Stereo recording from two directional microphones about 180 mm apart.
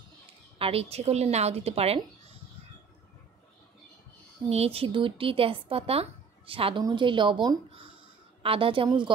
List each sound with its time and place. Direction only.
0.6 s speech: 35° right (ahead or behind)
4.5 s speech: 35° right (ahead or behind)